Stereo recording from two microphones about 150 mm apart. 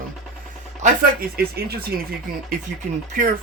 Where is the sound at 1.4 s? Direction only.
90° right.